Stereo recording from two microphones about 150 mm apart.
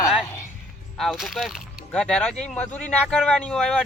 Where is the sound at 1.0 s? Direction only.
Centre (ahead or behind).